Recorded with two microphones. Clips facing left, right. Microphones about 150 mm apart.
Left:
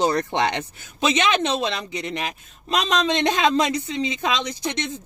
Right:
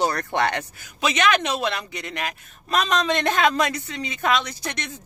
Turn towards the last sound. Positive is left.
turn(degrees=20)  # may be behind; listen again after turning